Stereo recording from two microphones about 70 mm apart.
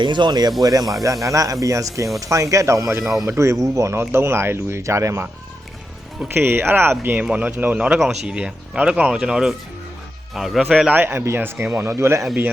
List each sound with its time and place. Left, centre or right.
0.0 s speech: right
0.6 s speech: right
4.1 s speech: right
6.2 s speech: right; by 10.7 s centre
10.9 s speech: right